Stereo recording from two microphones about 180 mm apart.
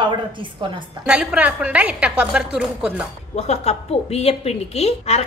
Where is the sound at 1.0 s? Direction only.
5° right (ahead or behind).